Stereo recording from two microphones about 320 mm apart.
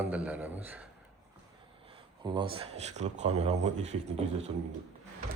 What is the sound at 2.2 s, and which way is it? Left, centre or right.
Speech, centre.